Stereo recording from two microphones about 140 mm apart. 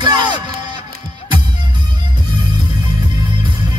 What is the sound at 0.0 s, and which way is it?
Music, 30° right (ahead or behind).